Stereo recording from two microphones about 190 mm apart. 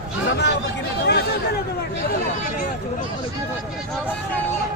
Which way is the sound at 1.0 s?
60° left (ahead or behind).